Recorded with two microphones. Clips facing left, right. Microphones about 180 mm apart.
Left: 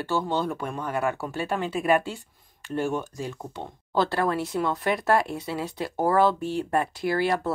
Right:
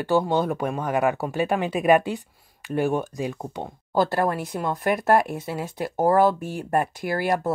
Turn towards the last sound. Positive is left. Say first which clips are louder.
# even
turn(degrees=-45)  # may be behind; listen again after turning